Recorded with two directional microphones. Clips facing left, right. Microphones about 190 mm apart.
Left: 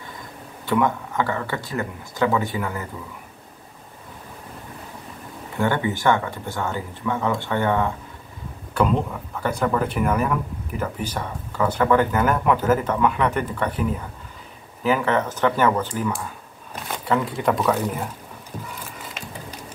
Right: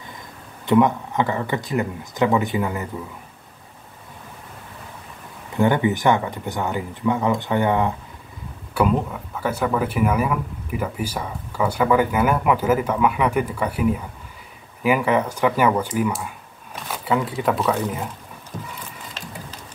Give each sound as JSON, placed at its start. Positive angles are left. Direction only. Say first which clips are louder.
{"t": 0.7, "sound": "speech", "louder": "right 4 dB", "side_deg": -20}
{"t": 5.6, "sound": "speech", "louder": "right 4 dB", "side_deg": -20}
{"t": 8.7, "sound": "speech", "louder": "right 1 dB", "side_deg": -5}